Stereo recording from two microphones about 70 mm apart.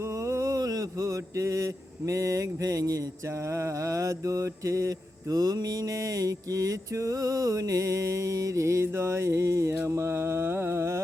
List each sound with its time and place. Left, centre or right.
0.0 s mantra: right
3.4 s mantra: right